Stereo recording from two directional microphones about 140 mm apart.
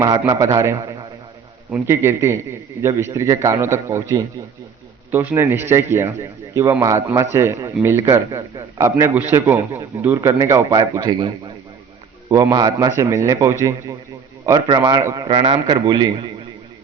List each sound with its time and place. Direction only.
0.0 s a man's voice: 25° right (ahead or behind)
1.9 s a man's voice: 20° right (ahead or behind)
15.3 s a man's voice: 45° right (ahead or behind)
15.6 s a man's voice: 30° right (ahead or behind)